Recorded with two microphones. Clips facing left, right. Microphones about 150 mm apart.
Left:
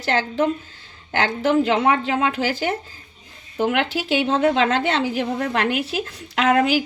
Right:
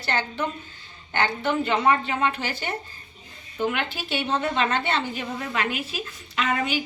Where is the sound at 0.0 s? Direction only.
90° left.